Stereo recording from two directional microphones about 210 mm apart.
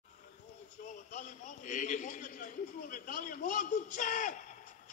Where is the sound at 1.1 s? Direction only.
35° left (ahead or behind).